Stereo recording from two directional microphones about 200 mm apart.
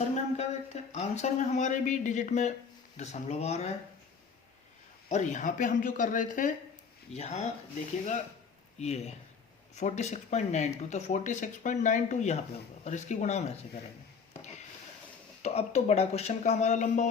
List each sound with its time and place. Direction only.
0.3 s speech: 35° left (ahead or behind)
5.0 s speech: 40° left (ahead or behind)
8.8 s speech: 35° left (ahead or behind)
15.4 s speech: 35° left (ahead or behind)